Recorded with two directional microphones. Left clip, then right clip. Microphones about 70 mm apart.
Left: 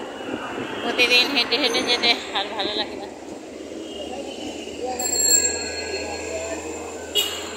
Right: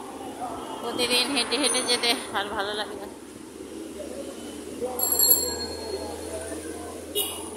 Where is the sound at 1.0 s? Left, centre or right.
Right.